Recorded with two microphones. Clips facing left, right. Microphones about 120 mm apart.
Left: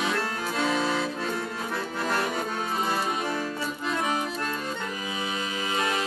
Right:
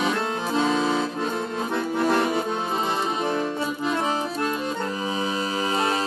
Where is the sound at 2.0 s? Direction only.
15° right (ahead or behind).